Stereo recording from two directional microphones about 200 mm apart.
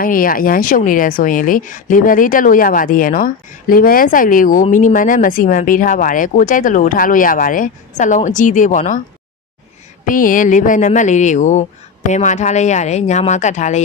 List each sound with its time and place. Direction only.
0.0 s a woman's voice: 45° left (ahead or behind)
10.1 s a woman's voice: 45° left (ahead or behind)